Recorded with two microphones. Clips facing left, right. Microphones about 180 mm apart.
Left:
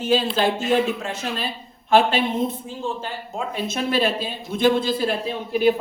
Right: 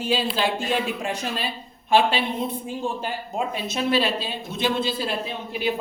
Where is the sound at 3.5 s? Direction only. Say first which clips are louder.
Left 1 dB; 50° left (ahead or behind).